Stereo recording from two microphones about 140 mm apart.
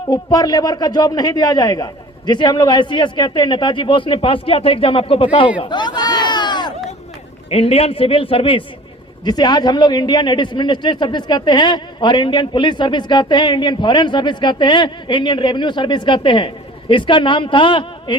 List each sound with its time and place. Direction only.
0.0 s speech: 30° left (ahead or behind)
5.5 s a sound: 35° left (ahead or behind)
7.5 s speech: 45° left (ahead or behind)